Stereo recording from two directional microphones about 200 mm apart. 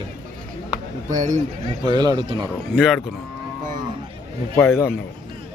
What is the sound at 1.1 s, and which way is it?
Speech, 40° right (ahead or behind).